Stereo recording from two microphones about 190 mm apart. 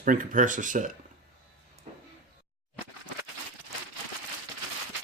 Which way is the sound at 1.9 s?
40° right (ahead or behind).